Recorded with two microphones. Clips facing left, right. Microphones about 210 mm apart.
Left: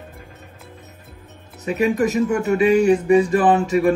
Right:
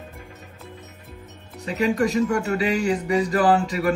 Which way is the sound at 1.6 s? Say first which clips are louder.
Left 3 dB; 20° left (ahead or behind).